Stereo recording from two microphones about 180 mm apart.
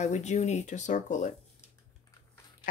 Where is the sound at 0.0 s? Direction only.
40° left (ahead or behind).